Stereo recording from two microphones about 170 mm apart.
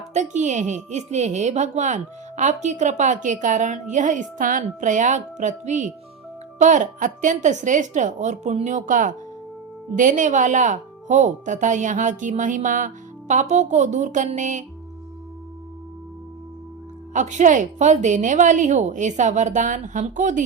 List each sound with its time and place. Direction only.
0.1 s a woman's voice: 45° right (ahead or behind)
17.2 s a woman's voice: 45° right (ahead or behind)